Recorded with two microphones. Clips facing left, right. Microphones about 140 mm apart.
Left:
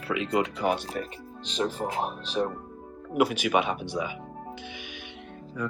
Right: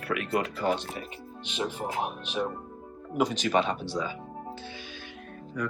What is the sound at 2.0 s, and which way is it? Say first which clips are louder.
Speech: left 2 dB; 35° left (ahead or behind).